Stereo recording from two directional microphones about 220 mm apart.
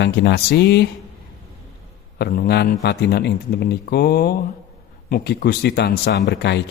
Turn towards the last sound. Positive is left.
turn(degrees=50)  # may be behind; listen again after turning